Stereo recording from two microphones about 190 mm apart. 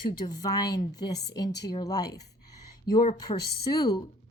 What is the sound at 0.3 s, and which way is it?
A woman's voice, 20° left (ahead or behind).